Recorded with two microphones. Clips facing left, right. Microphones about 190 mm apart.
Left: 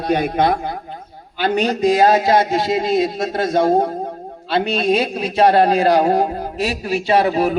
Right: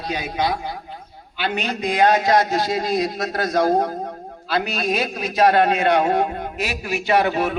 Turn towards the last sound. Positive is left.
turn(degrees=35)  # may be behind; listen again after turning